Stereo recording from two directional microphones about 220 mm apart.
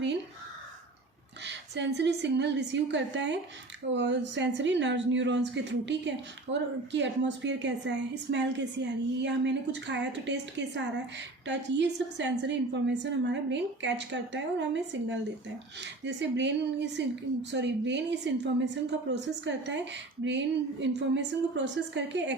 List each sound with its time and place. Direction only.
1.5 s a woman's voice: 50° right (ahead or behind)